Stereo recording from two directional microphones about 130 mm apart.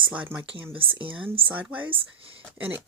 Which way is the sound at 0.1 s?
10° right (ahead or behind).